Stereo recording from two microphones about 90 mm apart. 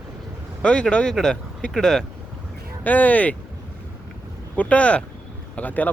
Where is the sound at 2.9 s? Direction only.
20° left (ahead or behind).